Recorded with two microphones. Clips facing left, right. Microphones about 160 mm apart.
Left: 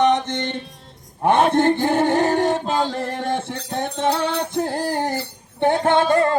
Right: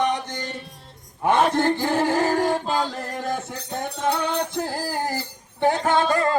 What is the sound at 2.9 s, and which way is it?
Music, 25° left (ahead or behind).